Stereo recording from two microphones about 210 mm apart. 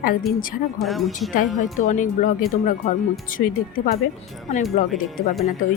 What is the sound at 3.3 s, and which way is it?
Speech, 40° left (ahead or behind).